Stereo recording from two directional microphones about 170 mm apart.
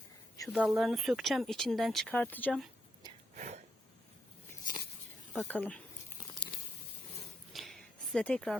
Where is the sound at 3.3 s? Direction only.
45° right (ahead or behind).